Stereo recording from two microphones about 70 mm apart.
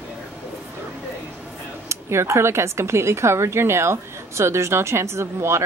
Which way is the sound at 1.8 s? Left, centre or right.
Right.